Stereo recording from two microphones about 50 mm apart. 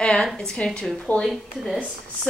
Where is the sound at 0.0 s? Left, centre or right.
Centre.